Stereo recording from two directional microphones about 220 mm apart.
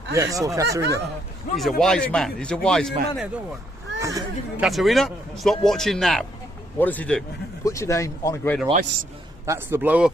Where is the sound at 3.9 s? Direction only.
15° right (ahead or behind).